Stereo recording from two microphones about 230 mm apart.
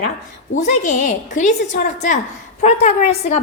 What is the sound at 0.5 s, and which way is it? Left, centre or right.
A woman's voice, left.